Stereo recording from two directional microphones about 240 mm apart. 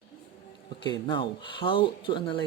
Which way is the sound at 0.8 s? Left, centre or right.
Centre.